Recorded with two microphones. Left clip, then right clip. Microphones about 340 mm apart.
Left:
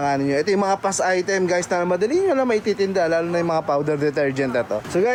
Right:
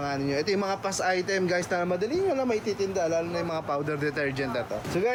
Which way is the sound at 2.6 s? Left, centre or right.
Left.